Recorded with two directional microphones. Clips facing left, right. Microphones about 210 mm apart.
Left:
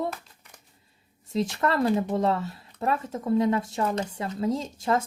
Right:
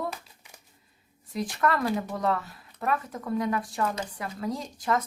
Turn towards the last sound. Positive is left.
turn(degrees=25)  # may be behind; listen again after turning